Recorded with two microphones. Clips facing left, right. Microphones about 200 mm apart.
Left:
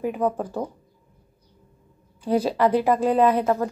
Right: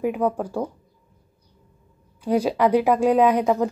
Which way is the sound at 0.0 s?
10° right (ahead or behind).